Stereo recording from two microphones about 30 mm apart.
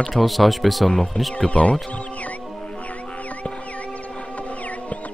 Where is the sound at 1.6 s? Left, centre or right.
Left.